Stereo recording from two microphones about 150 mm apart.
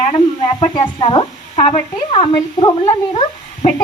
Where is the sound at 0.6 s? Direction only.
35° left (ahead or behind).